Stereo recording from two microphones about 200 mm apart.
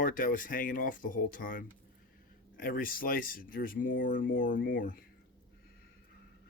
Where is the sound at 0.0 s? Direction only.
45° left (ahead or behind).